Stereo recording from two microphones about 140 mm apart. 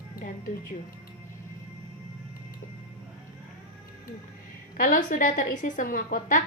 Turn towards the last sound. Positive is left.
turn(degrees=75)  # may be behind; listen again after turning